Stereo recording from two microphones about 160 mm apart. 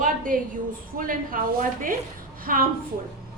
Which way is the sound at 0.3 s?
60° right (ahead or behind).